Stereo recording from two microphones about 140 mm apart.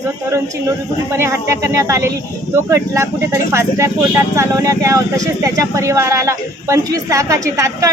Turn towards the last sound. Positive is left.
turn(degrees=-25)  # may be behind; listen again after turning